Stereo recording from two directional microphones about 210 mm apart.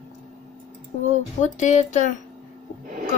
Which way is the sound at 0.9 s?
35° left (ahead or behind).